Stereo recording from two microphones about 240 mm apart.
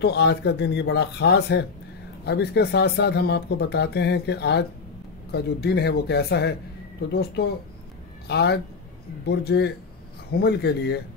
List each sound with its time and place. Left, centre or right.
0.0 s speech: left